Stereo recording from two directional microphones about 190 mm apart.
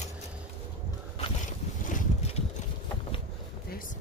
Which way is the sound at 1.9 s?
40° left (ahead or behind).